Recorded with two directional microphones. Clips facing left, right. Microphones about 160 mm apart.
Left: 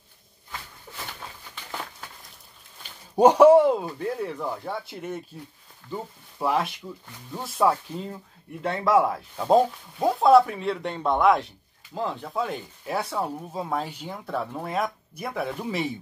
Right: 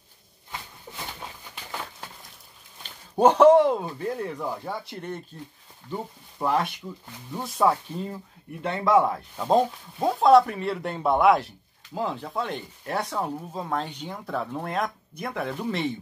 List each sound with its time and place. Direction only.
0.9 s pigeon: 25° right (ahead or behind)
3.2 s speech: 10° left (ahead or behind)